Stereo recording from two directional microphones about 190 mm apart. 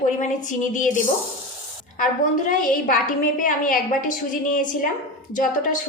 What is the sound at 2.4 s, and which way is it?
A woman's voice, 45° left (ahead or behind).